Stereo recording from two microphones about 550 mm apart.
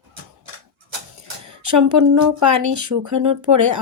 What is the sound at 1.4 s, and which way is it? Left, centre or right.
Speech, right.